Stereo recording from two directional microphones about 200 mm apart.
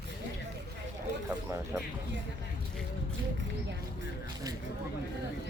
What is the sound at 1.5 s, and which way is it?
Music, 15° right (ahead or behind).